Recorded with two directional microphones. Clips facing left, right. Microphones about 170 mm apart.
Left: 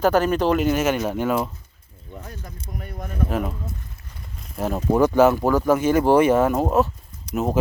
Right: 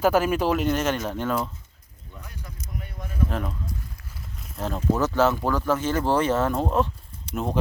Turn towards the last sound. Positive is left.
turn(degrees=5)  # may be behind; listen again after turning